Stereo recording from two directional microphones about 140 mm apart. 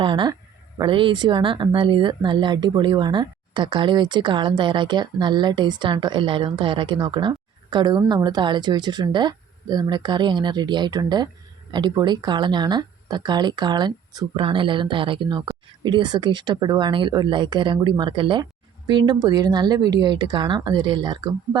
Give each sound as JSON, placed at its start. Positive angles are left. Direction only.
{"t": 0.0, "sound": "speech", "side_deg": -35}